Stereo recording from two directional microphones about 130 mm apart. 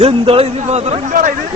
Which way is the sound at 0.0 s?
50° right (ahead or behind).